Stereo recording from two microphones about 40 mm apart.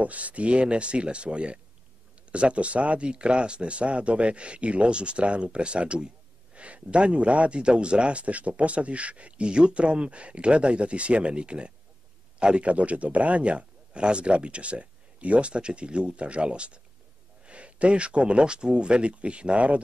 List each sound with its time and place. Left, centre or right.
0.0 s speech: right